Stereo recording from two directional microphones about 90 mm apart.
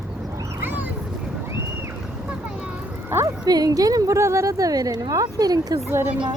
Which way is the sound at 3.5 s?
45° right (ahead or behind).